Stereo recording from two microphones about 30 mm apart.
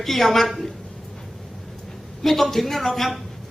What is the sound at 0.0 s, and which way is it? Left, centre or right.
Speech, centre.